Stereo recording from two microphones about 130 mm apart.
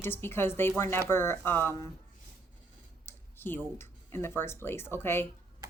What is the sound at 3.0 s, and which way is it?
Speech, 15° left (ahead or behind).